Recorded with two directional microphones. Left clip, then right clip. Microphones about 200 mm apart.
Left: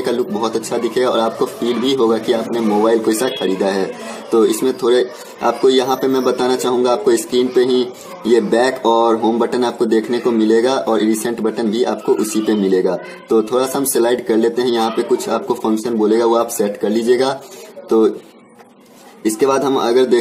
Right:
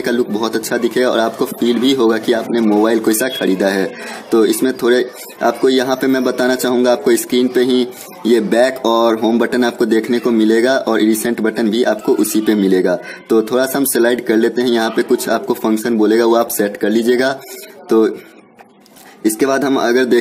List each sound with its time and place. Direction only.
0.0 s speech: 45° right (ahead or behind)
19.2 s speech: 45° right (ahead or behind)